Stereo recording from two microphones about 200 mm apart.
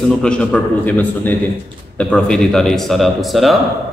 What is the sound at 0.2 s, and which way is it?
A man's voice, 5° left (ahead or behind).